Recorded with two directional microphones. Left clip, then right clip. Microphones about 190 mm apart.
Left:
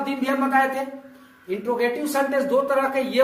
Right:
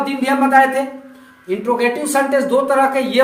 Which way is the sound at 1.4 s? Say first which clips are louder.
Right 6 dB; 25° right (ahead or behind).